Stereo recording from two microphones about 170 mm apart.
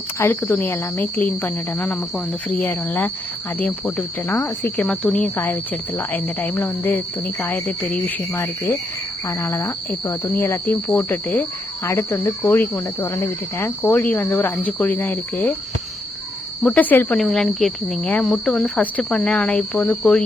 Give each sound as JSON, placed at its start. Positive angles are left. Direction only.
{"t": 0.2, "sound": "speech", "side_deg": 15}
{"t": 8.0, "sound": "speech", "side_deg": 15}
{"t": 16.6, "sound": "speech", "side_deg": 10}